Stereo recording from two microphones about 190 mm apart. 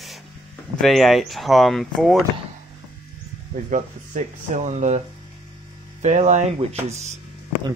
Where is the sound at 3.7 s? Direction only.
40° right (ahead or behind).